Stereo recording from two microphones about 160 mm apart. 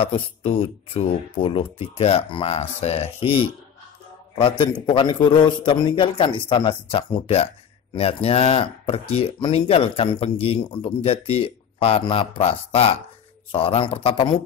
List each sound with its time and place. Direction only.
0.0 s speech: 35° left (ahead or behind)